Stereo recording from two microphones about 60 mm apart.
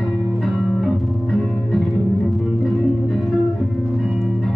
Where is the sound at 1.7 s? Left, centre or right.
Centre.